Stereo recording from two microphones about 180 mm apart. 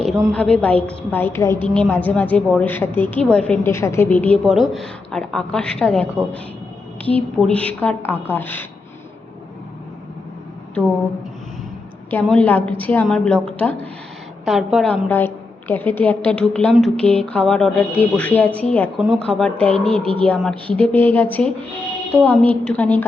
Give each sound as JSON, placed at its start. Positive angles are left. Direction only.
{"t": 0.1, "sound": "a woman's voice", "side_deg": 0}
{"t": 12.2, "sound": "a woman's voice", "side_deg": 5}
{"t": 15.1, "sound": "a woman's voice", "side_deg": 10}
{"t": 20.0, "sound": "speech", "side_deg": -30}
{"t": 20.2, "sound": "a woman's voice", "side_deg": 5}